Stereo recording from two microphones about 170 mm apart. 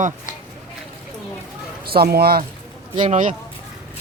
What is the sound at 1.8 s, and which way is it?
Speech, 65° right (ahead or behind).